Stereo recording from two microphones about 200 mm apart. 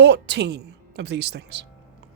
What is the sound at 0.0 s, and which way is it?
Speech, 60° right (ahead or behind).